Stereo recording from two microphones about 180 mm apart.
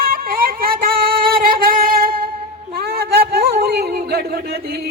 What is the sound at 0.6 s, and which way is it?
Singing, 55° right (ahead or behind).